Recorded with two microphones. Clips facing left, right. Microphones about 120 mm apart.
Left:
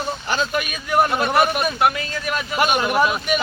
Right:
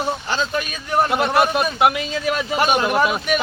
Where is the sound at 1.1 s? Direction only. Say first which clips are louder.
Right 1 dB; 20° right (ahead or behind).